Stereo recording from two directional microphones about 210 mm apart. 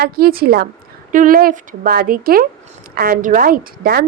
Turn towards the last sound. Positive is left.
turn(degrees=-45)  # may be behind; listen again after turning